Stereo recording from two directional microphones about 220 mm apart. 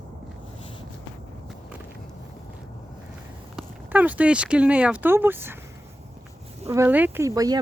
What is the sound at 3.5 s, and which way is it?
Speech, 5° right (ahead or behind).